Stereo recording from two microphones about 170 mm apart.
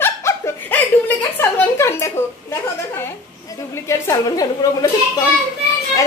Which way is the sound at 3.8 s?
20° left (ahead or behind).